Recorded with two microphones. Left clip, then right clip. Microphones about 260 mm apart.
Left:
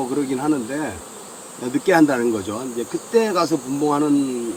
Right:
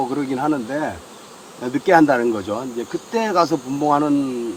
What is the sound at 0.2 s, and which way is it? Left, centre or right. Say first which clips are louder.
Speech: even; centre.